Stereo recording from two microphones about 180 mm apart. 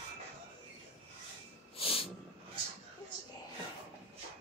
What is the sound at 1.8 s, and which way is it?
Snort, 30° left (ahead or behind).